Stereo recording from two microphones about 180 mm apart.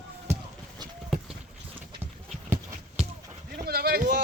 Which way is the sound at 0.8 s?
25° right (ahead or behind).